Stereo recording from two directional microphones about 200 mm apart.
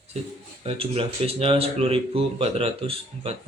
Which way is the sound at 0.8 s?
30° right (ahead or behind).